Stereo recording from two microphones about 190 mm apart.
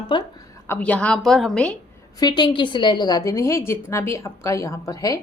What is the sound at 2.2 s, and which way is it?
A woman's voice, 25° left (ahead or behind).